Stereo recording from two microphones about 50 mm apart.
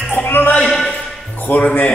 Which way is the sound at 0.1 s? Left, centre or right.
Left.